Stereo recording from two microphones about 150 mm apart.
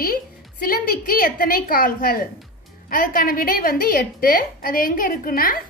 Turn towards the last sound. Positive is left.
turn(degrees=70)  # may be behind; listen again after turning